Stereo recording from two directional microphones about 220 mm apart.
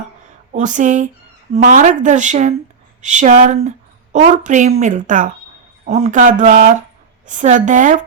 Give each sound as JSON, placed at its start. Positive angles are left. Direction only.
{"t": 0.5, "sound": "speech", "side_deg": -35}